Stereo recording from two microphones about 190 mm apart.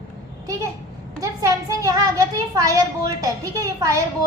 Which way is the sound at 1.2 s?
15° right (ahead or behind).